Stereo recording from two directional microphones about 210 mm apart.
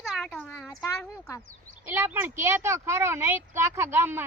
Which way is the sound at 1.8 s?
10° right (ahead or behind).